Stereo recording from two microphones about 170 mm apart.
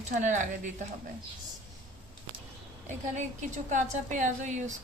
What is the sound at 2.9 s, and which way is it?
A woman's voice, 45° right (ahead or behind).